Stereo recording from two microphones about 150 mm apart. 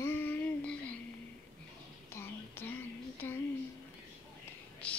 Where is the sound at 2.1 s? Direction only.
15° left (ahead or behind).